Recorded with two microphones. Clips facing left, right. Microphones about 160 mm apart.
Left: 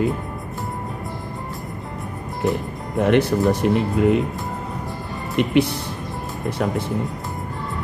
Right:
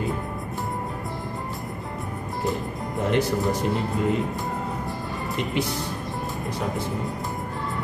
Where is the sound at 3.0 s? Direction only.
65° left (ahead or behind).